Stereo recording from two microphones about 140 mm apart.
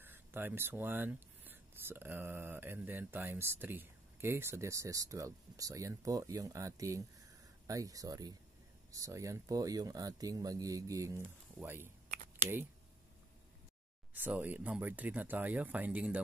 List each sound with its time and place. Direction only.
0.0 s speech: 15° right (ahead or behind)
14.1 s speech: 10° right (ahead or behind)